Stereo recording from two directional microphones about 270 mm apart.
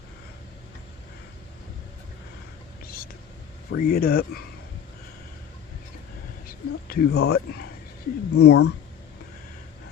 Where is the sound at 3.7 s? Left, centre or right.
Left.